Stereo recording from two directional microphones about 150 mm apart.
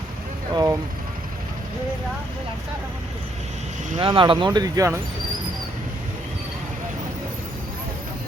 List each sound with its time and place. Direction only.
0.5 s speech: 25° right (ahead or behind)
3.9 s speech: 35° right (ahead or behind)